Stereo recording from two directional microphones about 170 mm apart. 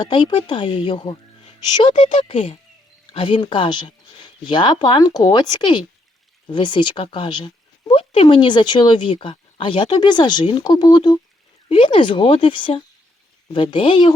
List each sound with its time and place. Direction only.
0.0 s speech: 30° left (ahead or behind)